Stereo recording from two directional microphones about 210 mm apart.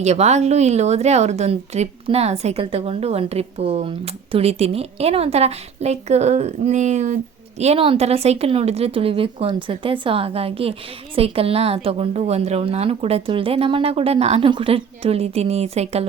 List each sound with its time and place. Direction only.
0.0 s a woman's voice: 30° right (ahead or behind)